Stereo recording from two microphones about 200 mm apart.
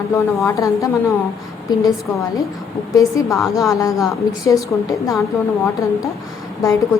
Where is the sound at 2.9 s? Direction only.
15° left (ahead or behind).